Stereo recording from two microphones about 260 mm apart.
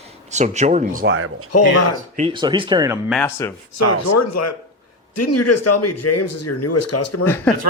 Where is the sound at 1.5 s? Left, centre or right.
Left.